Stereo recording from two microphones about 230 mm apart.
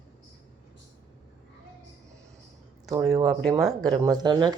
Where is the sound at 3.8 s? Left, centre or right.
Centre.